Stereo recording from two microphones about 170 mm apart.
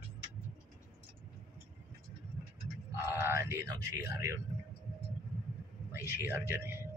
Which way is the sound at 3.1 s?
15° right (ahead or behind).